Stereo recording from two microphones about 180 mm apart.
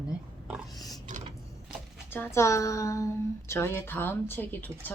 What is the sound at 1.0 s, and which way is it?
Mechanisms, 45° right (ahead or behind).